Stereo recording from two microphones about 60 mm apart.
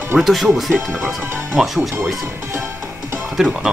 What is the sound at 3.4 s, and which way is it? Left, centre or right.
Speech, centre.